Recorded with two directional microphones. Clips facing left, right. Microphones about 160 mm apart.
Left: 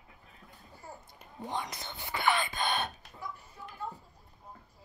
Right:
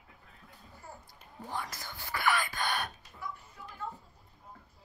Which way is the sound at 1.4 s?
20° left (ahead or behind).